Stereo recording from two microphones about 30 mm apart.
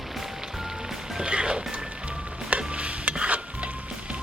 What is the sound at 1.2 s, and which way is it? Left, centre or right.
Music, right.